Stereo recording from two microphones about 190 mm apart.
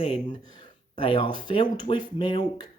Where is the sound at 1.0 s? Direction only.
25° left (ahead or behind).